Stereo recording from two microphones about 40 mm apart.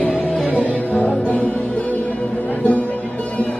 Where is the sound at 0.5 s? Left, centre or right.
Left.